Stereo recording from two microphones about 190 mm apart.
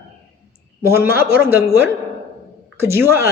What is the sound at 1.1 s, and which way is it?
Speech, 55° left (ahead or behind).